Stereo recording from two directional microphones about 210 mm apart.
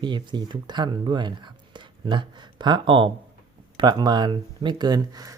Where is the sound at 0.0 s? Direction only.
20° right (ahead or behind).